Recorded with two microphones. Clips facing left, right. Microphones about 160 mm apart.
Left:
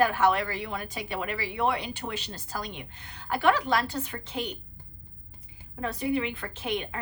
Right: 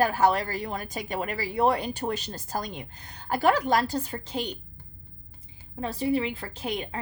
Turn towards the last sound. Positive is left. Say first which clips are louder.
# even
turn(degrees=-35)  # may be behind; listen again after turning